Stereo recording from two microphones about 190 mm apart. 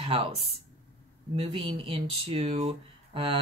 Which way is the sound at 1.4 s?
30° right (ahead or behind).